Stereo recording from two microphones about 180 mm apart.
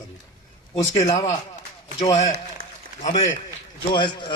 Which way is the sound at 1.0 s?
35° left (ahead or behind).